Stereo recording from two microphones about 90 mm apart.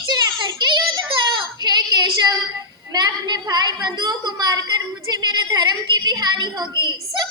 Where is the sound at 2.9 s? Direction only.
50° right (ahead or behind).